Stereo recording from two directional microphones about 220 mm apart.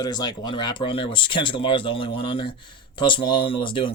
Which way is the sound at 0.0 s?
20° left (ahead or behind).